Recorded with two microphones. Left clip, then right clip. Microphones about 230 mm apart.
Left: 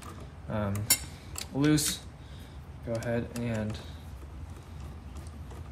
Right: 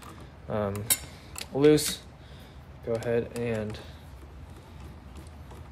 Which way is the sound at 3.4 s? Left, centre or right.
Right.